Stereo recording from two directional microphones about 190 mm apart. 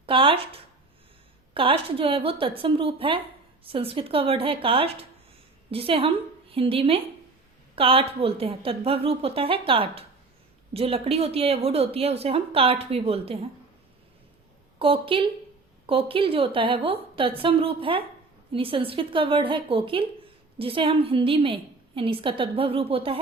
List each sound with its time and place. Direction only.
0.0 s a woman's voice: 30° right (ahead or behind)
14.8 s a woman's voice: 30° right (ahead or behind)